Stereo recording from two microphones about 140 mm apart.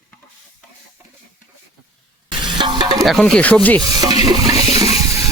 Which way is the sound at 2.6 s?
35° right (ahead or behind).